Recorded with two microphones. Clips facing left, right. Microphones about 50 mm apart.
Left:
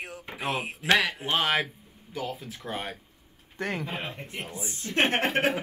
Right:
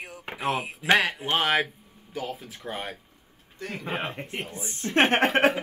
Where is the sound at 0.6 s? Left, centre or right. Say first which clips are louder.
Even; left.